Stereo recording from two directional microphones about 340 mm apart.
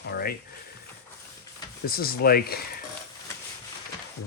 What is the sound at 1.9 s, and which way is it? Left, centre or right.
Speech, left.